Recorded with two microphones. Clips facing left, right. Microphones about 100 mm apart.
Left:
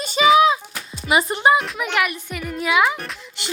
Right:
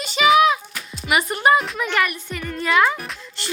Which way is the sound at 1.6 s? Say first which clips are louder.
Even; 5° left (ahead or behind).